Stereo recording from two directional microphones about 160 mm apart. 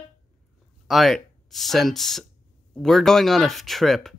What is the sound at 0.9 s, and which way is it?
Speech, centre (ahead or behind).